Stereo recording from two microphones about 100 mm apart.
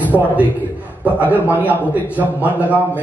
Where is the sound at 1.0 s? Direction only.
15° right (ahead or behind).